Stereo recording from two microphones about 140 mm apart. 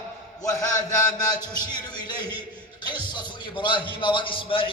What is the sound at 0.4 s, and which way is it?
A man's voice, 25° left (ahead or behind).